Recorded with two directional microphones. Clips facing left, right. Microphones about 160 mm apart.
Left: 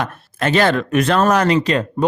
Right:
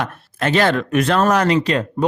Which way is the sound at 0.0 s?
35° left (ahead or behind).